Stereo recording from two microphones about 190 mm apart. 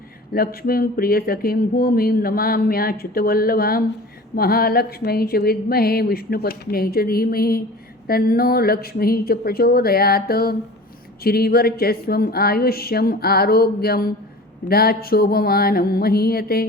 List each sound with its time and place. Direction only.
0.3 s speech: 50° left (ahead or behind)